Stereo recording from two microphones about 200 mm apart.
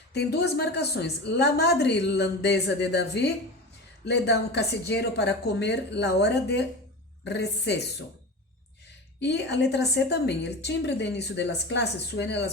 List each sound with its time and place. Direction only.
0.1 s a woman's voice: 55° left (ahead or behind)
9.2 s a woman's voice: 60° left (ahead or behind)